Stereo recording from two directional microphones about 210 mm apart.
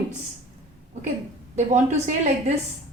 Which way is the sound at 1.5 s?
35° right (ahead or behind).